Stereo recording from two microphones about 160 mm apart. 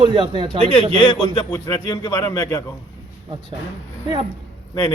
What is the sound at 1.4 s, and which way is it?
A man's voice, 20° left (ahead or behind).